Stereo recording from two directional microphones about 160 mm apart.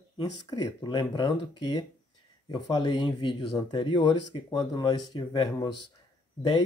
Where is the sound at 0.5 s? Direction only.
25° left (ahead or behind).